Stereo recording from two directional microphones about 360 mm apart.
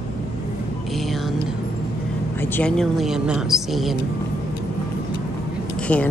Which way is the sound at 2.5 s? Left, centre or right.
Centre.